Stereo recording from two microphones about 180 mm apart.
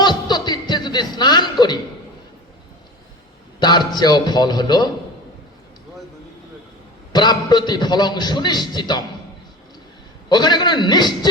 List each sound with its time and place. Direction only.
0.0 s chuckle: 25° left (ahead or behind)
3.6 s a man's voice: 25° left (ahead or behind)
7.1 s a man's voice: 25° left (ahead or behind)
10.2 s a man's voice: 25° left (ahead or behind)